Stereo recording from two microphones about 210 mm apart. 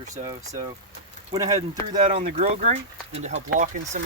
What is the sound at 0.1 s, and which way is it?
Speech, 15° right (ahead or behind).